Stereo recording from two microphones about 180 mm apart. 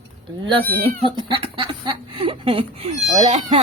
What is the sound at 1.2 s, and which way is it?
Speech, 30° right (ahead or behind).